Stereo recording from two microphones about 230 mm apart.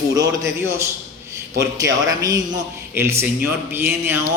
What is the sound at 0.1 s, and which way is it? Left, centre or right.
A man's voice, centre.